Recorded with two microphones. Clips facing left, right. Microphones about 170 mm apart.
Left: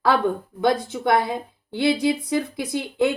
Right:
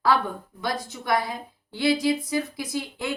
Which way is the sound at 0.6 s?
55° left (ahead or behind).